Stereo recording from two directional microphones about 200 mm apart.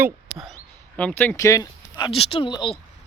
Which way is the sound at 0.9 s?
5° left (ahead or behind).